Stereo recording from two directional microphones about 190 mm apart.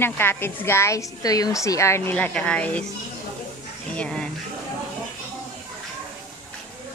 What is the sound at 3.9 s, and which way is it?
Speech, 5° left (ahead or behind).